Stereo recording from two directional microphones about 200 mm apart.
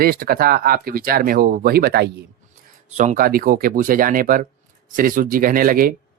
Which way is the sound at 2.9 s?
35° right (ahead or behind).